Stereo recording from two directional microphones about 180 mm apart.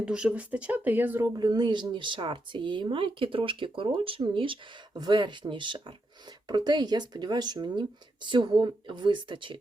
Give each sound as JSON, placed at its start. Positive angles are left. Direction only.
{"t": 0.0, "sound": "speech", "side_deg": -5}
{"t": 1.4, "sound": "speech", "side_deg": -25}